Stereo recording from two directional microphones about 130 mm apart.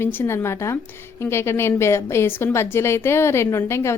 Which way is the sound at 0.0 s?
20° left (ahead or behind).